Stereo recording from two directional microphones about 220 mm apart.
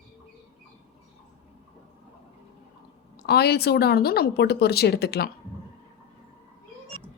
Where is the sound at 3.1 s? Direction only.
45° left (ahead or behind).